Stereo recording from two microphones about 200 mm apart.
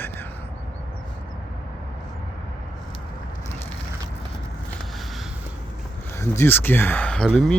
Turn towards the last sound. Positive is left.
turn(degrees=0)  # may be behind; listen again after turning